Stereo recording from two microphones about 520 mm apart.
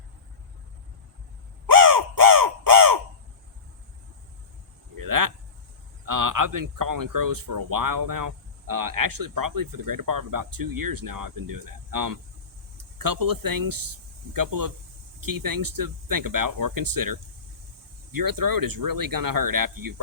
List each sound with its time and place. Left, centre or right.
1.6 s crow: right
4.9 s a sound: right
6.1 s speech: right